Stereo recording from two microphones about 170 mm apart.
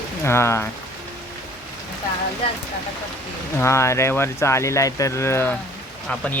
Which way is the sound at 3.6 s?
15° left (ahead or behind).